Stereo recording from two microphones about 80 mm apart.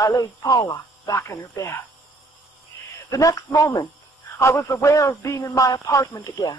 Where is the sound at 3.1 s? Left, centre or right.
Left.